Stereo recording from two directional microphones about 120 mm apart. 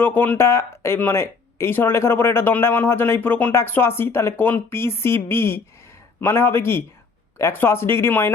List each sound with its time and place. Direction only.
0.0 s speech: 15° left (ahead or behind)